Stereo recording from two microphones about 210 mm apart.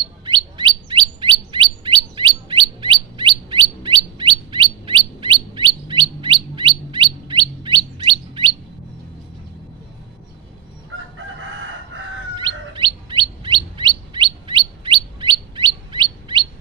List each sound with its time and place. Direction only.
0.2 s chirp: 20° right (ahead or behind)
12.4 s chirp: 20° right (ahead or behind)